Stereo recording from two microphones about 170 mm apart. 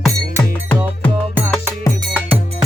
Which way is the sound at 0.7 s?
5° left (ahead or behind).